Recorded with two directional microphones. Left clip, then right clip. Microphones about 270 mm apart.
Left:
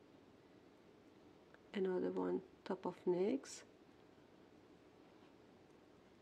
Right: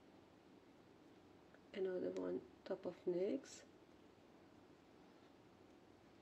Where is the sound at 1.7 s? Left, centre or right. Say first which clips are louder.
Left 3 dB; left.